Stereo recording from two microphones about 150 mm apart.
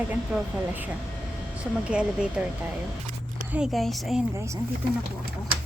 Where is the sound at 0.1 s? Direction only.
10° right (ahead or behind).